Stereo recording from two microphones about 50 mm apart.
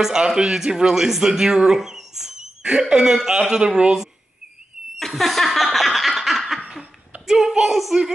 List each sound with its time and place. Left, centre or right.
0.0 s speech: centre
4.9 s snicker: centre
7.2 s speech: centre